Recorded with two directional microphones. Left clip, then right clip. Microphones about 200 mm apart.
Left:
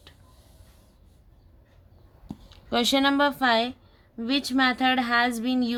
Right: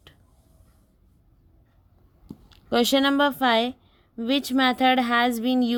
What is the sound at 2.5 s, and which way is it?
A woman's voice, 30° right (ahead or behind).